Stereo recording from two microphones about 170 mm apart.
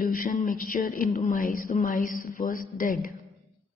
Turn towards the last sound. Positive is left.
turn(degrees=55)  # may be behind; listen again after turning